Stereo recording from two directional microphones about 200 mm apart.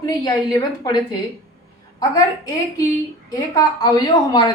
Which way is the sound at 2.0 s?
15° left (ahead or behind).